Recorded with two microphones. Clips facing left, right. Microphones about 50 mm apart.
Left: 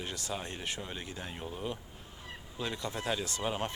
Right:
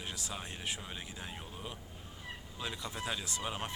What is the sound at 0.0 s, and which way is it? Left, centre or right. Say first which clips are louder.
Speech: left 4 dB; centre.